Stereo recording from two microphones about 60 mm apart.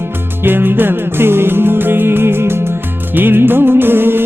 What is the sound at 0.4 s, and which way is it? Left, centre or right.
Music, right.